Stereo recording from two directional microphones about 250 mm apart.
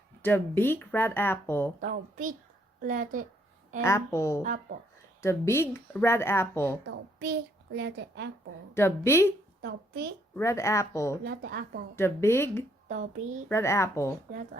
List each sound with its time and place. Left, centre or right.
0.2 s speech: centre
1.8 s speech: right
3.8 s speech: centre
4.4 s speech: right
5.2 s speech: centre
6.8 s a woman's voice: right
8.7 s speech: centre
9.6 s a woman's voice: right
10.3 s speech: centre
11.3 s speech: right
11.9 s speech: centre
12.9 s speech: right
13.5 s speech: centre